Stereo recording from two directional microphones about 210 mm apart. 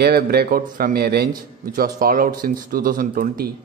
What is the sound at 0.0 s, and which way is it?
Speech, 50° right (ahead or behind).